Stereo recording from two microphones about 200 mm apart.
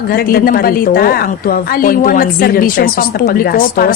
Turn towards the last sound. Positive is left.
turn(degrees=45)  # may be behind; listen again after turning